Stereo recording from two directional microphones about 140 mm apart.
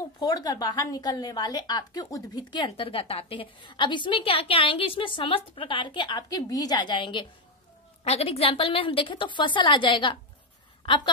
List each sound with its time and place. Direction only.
0.2 s a woman's voice: 25° left (ahead or behind)
8.0 s a woman's voice: 45° left (ahead or behind)